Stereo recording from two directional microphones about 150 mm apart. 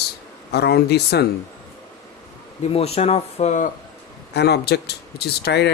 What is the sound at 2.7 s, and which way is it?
Speech, 40° left (ahead or behind).